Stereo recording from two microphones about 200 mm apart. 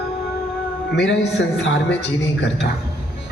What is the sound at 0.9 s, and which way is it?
A woman's voice, 60° left (ahead or behind).